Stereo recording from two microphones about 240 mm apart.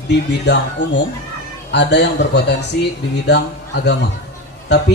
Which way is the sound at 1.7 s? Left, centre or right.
Left.